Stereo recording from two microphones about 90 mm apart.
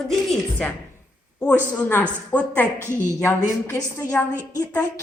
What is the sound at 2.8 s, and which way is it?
Speech, 25° right (ahead or behind).